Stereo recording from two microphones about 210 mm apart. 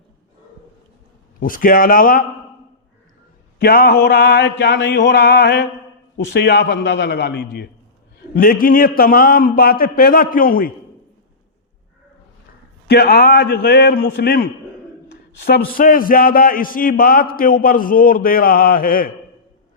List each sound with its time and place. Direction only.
1.4 s speech: 40° left (ahead or behind)
3.6 s a man's voice: 45° left (ahead or behind)
12.9 s a man's voice: 45° left (ahead or behind)